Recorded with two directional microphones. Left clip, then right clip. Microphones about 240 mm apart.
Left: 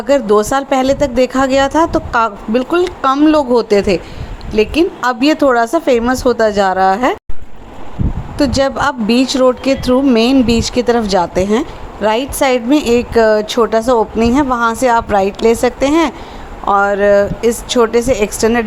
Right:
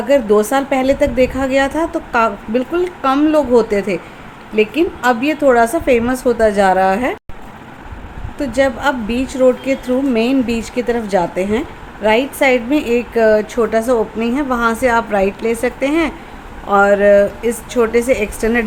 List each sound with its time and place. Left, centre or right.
0.1 s a woman's voice: centre
8.4 s a woman's voice: centre